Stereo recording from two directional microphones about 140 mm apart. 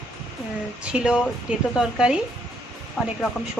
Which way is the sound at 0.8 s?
5° right (ahead or behind).